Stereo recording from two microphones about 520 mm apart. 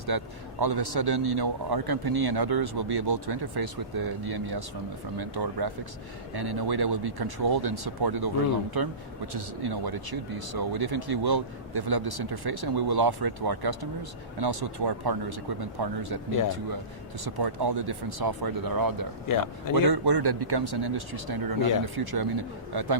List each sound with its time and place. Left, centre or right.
0.1 s speech: right
17.2 s speech: right
19.3 s speech: left
19.7 s speech: right